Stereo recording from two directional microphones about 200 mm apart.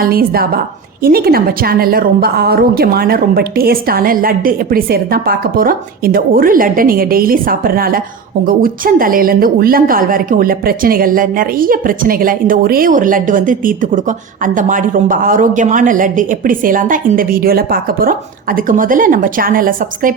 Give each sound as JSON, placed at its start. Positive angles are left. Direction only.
{"t": 0.0, "sound": "a woman's voice", "side_deg": -50}